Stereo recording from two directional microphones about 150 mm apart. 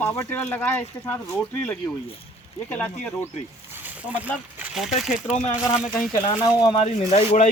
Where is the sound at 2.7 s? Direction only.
10° left (ahead or behind).